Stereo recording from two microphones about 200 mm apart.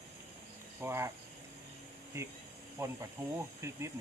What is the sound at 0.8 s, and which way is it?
Speech, 10° right (ahead or behind).